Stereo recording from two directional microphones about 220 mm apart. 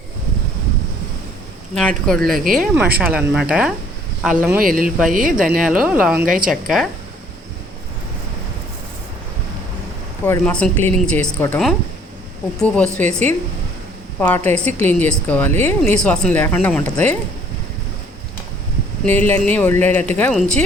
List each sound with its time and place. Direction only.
1.7 s speech: 5° left (ahead or behind)
2.6 s speech: 5° right (ahead or behind)
4.6 s speech: 40° right (ahead or behind)
5.5 s speech: centre (ahead or behind)
6.2 s speech: 40° right (ahead or behind)
6.5 s speech: centre (ahead or behind)
10.2 s speech: 10° left (ahead or behind)
19.0 s speech: 10° left (ahead or behind)